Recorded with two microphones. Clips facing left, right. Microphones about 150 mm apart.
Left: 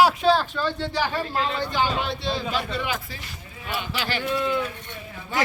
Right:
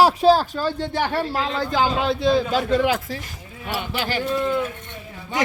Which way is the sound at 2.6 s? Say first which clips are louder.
Right 9 dB; 85° right.